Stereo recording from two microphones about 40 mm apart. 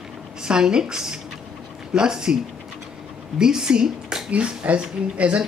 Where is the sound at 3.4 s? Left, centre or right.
Centre.